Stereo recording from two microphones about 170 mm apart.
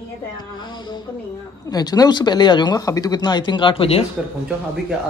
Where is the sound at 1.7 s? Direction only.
25° left (ahead or behind).